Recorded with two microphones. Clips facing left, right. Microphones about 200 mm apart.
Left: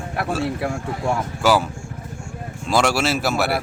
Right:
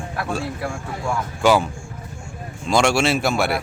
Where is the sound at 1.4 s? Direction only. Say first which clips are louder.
Right 2 dB; 5° left (ahead or behind).